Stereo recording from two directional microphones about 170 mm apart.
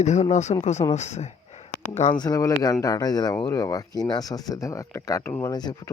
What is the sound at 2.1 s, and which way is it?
Speech, 25° left (ahead or behind).